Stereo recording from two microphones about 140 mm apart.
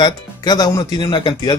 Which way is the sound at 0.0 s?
30° left (ahead or behind).